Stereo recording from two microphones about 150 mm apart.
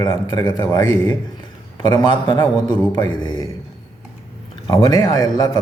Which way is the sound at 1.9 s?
30° left (ahead or behind).